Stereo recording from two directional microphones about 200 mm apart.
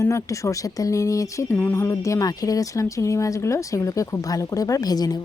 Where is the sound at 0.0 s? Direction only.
15° left (ahead or behind).